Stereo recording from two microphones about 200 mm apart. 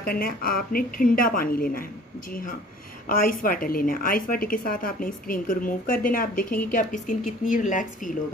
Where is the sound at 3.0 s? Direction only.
45° left (ahead or behind).